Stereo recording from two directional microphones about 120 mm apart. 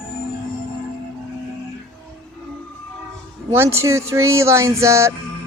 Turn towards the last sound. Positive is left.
turn(degrees=-25)  # may be behind; listen again after turning